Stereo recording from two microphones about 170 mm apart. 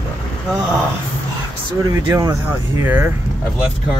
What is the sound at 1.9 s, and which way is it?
Speech, 20° right (ahead or behind).